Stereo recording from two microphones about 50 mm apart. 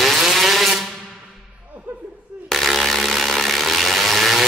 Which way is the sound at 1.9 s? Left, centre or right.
Right.